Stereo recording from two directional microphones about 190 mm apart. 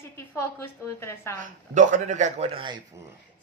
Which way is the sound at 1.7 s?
40° right (ahead or behind).